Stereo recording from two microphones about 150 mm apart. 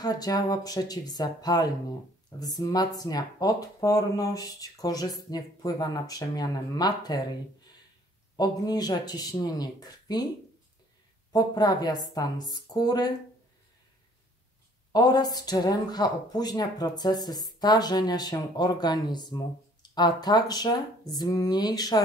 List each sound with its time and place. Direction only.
0.0 s speech: 25° left (ahead or behind)
8.4 s speech: 25° left (ahead or behind)
11.3 s speech: 25° left (ahead or behind)
14.9 s speech: 25° left (ahead or behind)